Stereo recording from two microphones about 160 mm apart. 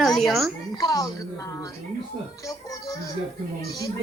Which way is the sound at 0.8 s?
25° left (ahead or behind).